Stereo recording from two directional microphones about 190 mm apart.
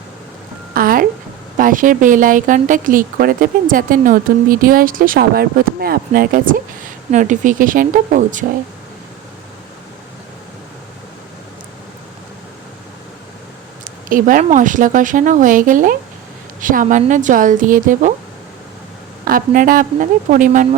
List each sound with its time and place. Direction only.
0.7 s a sound: 50° right (ahead or behind)
1.5 s speech: 45° right (ahead or behind)
13.8 s speech: 45° right (ahead or behind)
19.2 s speech: 50° right (ahead or behind)